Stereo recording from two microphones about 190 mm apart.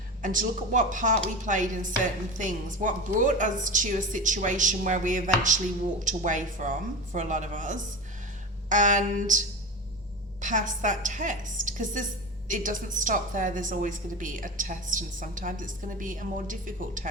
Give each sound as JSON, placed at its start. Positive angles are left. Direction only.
{"t": 0.2, "sound": "a woman's voice", "side_deg": -45}
{"t": 10.4, "sound": "a woman's voice", "side_deg": -40}